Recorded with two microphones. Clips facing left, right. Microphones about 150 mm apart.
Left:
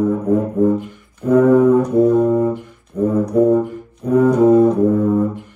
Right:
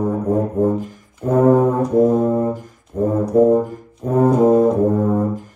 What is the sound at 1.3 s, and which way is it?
Brass instrument, 45° right (ahead or behind).